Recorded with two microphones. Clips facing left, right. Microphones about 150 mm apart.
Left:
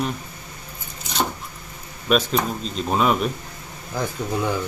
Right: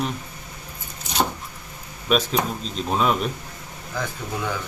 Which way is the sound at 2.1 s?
Centre (ahead or behind).